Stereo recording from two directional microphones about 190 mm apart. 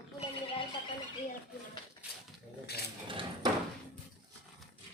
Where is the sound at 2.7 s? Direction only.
60° left (ahead or behind).